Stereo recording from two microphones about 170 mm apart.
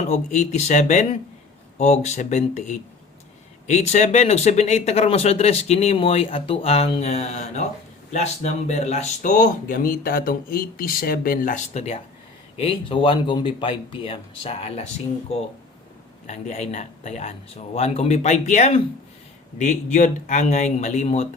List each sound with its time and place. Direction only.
0.1 s speech: 45° left (ahead or behind)